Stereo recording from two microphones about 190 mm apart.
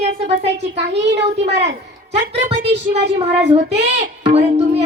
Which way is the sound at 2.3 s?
35° right (ahead or behind).